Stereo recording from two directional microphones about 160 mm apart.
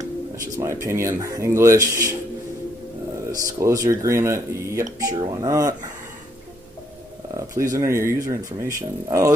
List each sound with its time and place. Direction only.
0.6 s speech: 20° right (ahead or behind)
3.3 s speech: 20° right (ahead or behind)
7.3 s speech: 20° right (ahead or behind)